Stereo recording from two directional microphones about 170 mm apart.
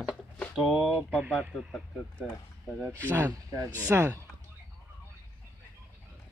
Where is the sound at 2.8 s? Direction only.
15° right (ahead or behind).